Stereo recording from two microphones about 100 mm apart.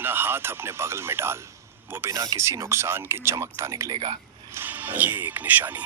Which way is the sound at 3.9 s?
85° right.